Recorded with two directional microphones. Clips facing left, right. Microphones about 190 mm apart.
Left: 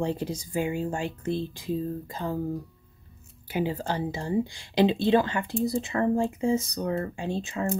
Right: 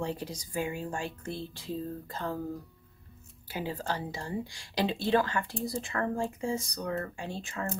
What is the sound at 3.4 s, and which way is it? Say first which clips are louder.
Speech: left 6 dB; 20° left (ahead or behind).